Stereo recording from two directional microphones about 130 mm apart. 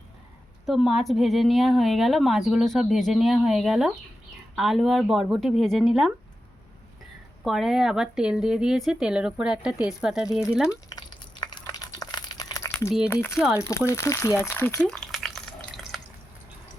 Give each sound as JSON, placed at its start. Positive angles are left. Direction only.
{"t": 0.6, "sound": "a woman's voice", "side_deg": 0}
{"t": 7.4, "sound": "a woman's voice", "side_deg": 0}
{"t": 10.7, "sound": "crumpling", "side_deg": 30}
{"t": 13.1, "sound": "speech", "side_deg": 20}
{"t": 13.4, "sound": "speech", "side_deg": -10}
{"t": 13.7, "sound": "speech", "side_deg": 20}
{"t": 14.8, "sound": "drip", "side_deg": 5}